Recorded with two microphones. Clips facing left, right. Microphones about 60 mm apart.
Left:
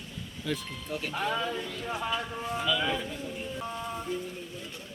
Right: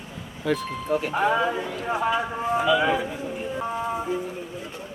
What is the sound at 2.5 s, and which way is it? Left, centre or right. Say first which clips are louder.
Speech: right 8 dB; centre.